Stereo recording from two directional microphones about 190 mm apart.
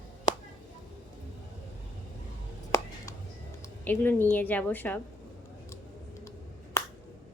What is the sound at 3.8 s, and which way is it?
A woman's voice, 10° left (ahead or behind).